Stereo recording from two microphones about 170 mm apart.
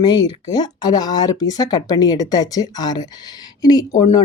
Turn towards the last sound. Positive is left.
turn(degrees=20)  # may be behind; listen again after turning